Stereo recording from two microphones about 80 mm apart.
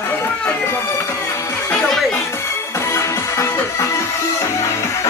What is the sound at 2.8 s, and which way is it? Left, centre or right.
Music, left.